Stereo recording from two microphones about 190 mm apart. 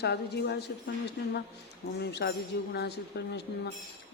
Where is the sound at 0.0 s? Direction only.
60° left (ahead or behind).